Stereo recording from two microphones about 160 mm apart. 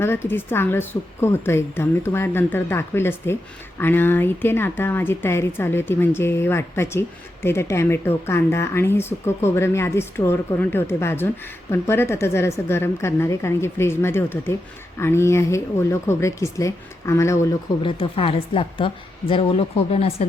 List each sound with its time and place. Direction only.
0.0 s speech: 15° left (ahead or behind)
17.8 s a woman's voice: 35° left (ahead or behind)